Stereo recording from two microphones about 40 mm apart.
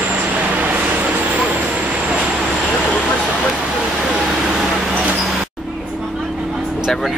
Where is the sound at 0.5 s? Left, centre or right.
Right.